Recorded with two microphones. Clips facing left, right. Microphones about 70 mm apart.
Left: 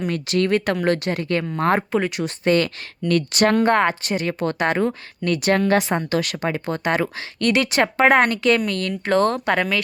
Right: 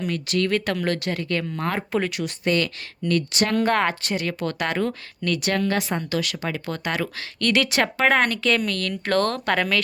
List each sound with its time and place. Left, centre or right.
0.0 s speech: left
1.5 s speech: left
3.0 s speech: left
3.5 s speech: left
5.4 s speech: left
7.2 s speech: centre